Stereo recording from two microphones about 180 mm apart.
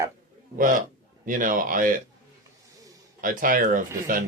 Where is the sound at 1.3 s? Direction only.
50° right (ahead or behind).